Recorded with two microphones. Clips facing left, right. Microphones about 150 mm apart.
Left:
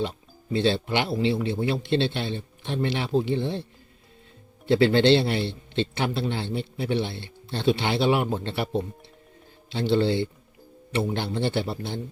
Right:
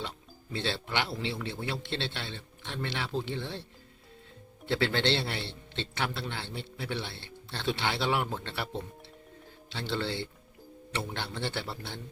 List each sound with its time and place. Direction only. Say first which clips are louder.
0.5 s a man's voice: left 9 dB; 20° left (ahead or behind)
4.7 s a man's voice: left 10 dB; 20° left (ahead or behind)